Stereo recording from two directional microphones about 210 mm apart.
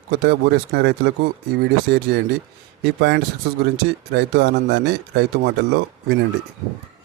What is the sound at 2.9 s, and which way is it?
Speech, 50° right (ahead or behind).